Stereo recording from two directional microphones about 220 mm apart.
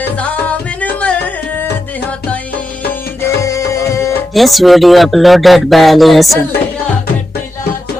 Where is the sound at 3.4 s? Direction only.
15° left (ahead or behind).